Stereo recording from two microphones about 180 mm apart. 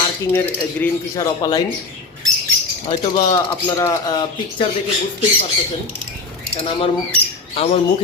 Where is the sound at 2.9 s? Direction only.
25° left (ahead or behind).